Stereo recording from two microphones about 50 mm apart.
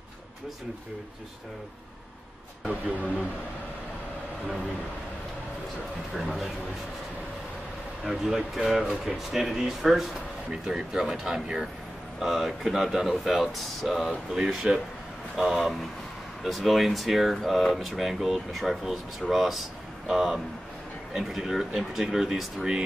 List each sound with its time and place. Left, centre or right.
6.1 s speech: centre
8.0 s speech: centre
14.3 s speech: centre